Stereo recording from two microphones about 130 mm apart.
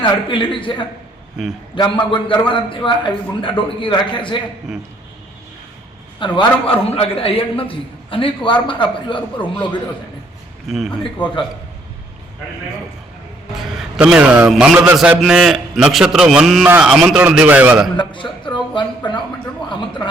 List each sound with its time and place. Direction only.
0.0 s a man's voice: 40° left (ahead or behind)
1.4 s a man's voice: centre (ahead or behind)
1.7 s a man's voice: 40° left (ahead or behind)
6.1 s a man's voice: 40° left (ahead or behind)
10.7 s a man's voice: centre (ahead or behind)
13.6 s a man's voice: 5° right (ahead or behind)
17.9 s a man's voice: 40° left (ahead or behind)